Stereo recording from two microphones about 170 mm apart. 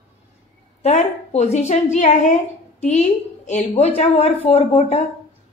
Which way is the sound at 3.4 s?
40° left (ahead or behind).